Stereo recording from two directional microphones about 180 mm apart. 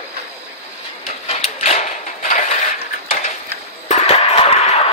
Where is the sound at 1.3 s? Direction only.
40° left (ahead or behind).